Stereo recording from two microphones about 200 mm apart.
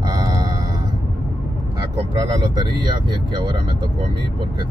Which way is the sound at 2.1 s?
20° right (ahead or behind).